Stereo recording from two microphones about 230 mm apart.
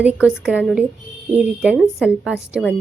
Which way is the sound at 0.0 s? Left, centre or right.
Centre.